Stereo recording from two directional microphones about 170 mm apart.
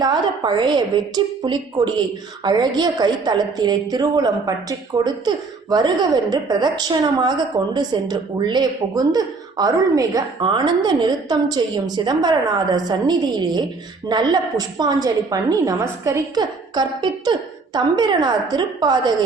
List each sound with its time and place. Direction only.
0.0 s a woman's voice: 25° right (ahead or behind)